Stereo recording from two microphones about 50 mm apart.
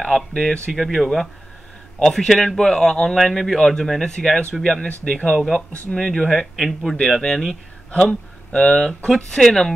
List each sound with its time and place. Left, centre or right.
0.0 s speech: centre
0.7 s a man's voice: centre
5.0 s a man's voice: left
6.5 s speech: centre
8.1 s speech: centre
8.8 s a man's voice: centre